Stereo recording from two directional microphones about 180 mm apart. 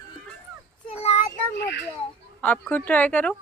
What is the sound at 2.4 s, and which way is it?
Speech, 10° left (ahead or behind).